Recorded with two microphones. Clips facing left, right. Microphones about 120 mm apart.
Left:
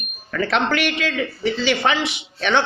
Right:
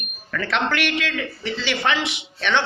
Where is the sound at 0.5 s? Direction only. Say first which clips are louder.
Left 1 dB; 40° left (ahead or behind).